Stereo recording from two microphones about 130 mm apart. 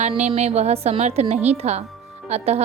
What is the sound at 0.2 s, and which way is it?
A woman's voice, 55° right (ahead or behind).